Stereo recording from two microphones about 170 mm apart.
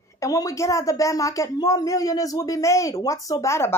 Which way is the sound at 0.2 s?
20° left (ahead or behind).